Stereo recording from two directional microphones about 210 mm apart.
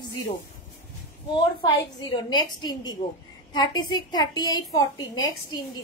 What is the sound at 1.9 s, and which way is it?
A child's voice, 20° left (ahead or behind).